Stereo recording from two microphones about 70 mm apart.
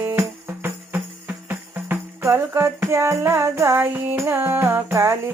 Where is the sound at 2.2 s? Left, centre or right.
Right.